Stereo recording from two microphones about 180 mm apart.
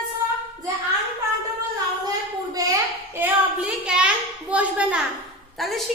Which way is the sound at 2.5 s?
20° right (ahead or behind).